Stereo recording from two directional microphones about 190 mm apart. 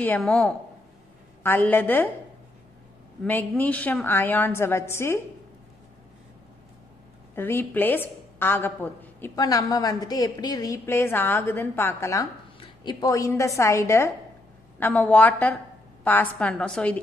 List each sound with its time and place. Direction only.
0.0 s a woman's voice: 10° left (ahead or behind)
3.3 s a woman's voice: 10° left (ahead or behind)
7.3 s a woman's voice: 10° left (ahead or behind)